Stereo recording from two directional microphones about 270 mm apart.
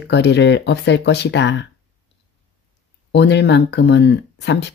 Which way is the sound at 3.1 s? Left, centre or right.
Left.